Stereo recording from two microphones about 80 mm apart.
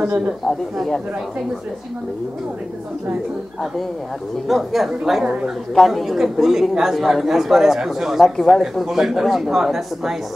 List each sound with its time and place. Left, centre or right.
0.7 s a man's voice: centre
4.5 s a man's voice: centre
5.8 s a man's voice: centre